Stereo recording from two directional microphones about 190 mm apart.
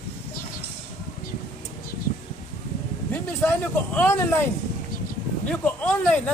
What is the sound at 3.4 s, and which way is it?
Speech, 10° left (ahead or behind).